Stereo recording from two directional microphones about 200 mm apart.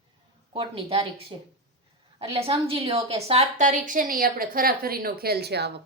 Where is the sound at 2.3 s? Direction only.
30° right (ahead or behind).